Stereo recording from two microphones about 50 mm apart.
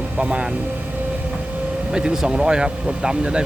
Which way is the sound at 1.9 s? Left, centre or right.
Centre.